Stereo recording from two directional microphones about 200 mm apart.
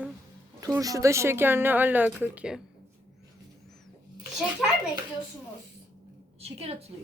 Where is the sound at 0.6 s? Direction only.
15° right (ahead or behind).